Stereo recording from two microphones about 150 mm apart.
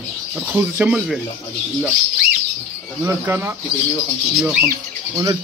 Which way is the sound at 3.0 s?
15° right (ahead or behind).